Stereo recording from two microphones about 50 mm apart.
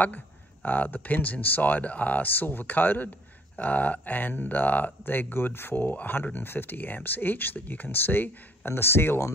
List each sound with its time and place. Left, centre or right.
0.7 s speech: left